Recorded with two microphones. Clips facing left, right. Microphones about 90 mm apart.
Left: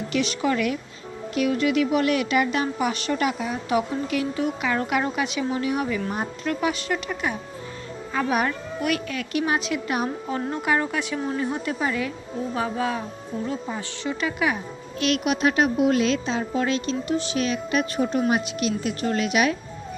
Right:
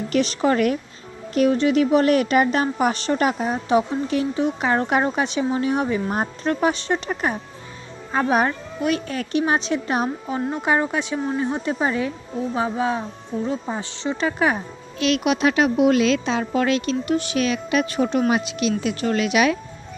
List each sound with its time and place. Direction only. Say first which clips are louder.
0.1 s a woman's voice: right 4 dB; 40° right (ahead or behind)
3.7 s a woman's voice: right 4 dB; 30° right (ahead or behind)
10.2 s a woman's voice: right 2 dB; 20° right (ahead or behind); by 14.6 s 35° right (ahead or behind)
15.2 s speech: right 2 dB; 90° right